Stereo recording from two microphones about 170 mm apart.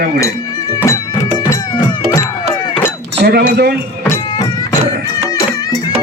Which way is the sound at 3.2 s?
65° right (ahead or behind).